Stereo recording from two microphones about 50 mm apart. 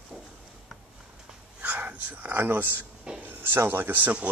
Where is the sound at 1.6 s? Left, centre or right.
Right.